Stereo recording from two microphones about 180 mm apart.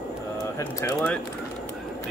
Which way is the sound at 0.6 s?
15° left (ahead or behind).